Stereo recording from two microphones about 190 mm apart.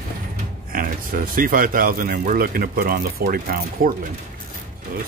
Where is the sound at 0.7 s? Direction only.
50° right (ahead or behind).